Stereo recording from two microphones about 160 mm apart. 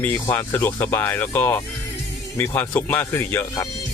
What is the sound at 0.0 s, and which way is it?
Speech, 15° left (ahead or behind).